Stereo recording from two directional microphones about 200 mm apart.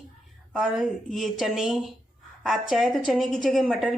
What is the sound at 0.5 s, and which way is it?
A woman's voice, centre (ahead or behind).